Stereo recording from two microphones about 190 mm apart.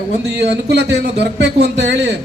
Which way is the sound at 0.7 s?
65° right (ahead or behind).